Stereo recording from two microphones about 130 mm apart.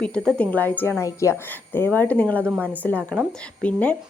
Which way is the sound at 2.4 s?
15° right (ahead or behind).